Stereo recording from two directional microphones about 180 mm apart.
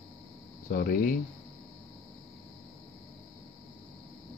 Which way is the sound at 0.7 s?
55° left (ahead or behind).